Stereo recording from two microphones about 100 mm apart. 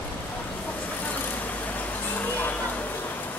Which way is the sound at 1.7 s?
15° left (ahead or behind).